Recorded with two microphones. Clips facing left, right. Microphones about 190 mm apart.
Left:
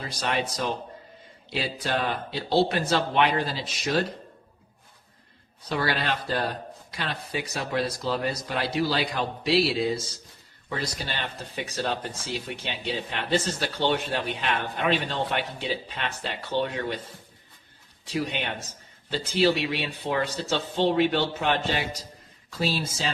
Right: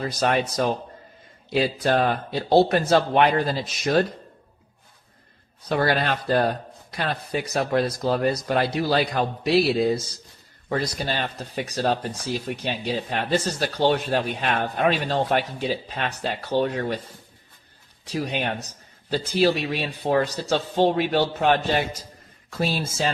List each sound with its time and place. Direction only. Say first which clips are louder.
0.0 s a man's voice: right 6 dB; 45° right (ahead or behind)
5.6 s a man's voice: right 5 dB; 50° right (ahead or behind)
18.1 s a man's voice: right 3 dB; 40° right (ahead or behind)